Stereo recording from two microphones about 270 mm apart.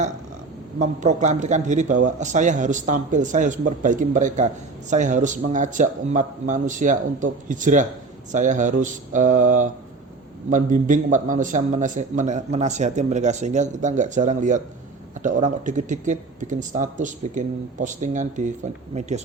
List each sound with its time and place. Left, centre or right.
0.8 s a man's voice: right